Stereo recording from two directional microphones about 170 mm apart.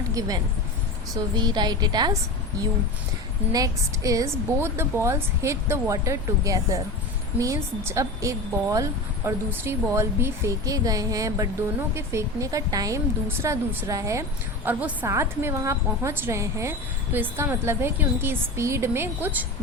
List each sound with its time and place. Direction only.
0.1 s a woman's voice: 20° right (ahead or behind)
3.5 s a woman's voice: 20° right (ahead or behind)